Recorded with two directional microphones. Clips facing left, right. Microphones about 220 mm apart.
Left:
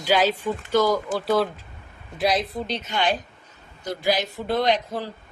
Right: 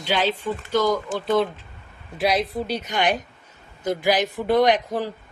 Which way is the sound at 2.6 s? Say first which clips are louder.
Right 2 dB; 10° right (ahead or behind).